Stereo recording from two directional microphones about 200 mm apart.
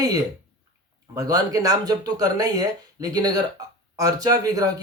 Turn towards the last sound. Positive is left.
turn(degrees=-20)  # may be behind; listen again after turning